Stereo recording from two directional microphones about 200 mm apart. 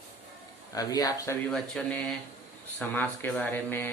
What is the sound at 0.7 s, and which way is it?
Speech, 20° left (ahead or behind).